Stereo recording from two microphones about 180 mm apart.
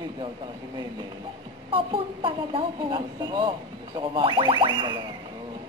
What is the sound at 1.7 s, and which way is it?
Speech, 30° right (ahead or behind).